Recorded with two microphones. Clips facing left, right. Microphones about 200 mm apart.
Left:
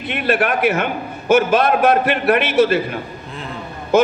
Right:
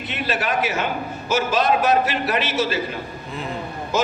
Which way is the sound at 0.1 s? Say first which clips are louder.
Left 6 dB; 60° left (ahead or behind).